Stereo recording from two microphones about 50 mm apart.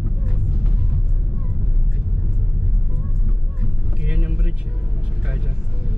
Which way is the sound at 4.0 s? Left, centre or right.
Right.